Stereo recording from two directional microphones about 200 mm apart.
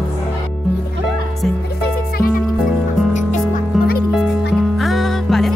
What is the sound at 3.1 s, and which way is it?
Music, 40° left (ahead or behind).